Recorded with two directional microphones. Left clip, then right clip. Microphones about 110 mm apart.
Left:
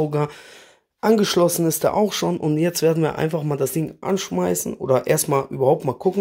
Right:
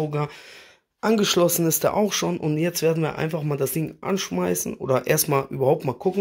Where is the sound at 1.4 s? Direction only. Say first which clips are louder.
Left 2 dB; 25° left (ahead or behind).